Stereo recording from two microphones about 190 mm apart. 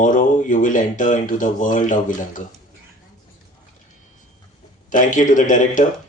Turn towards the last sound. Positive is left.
turn(degrees=45)  # may be behind; listen again after turning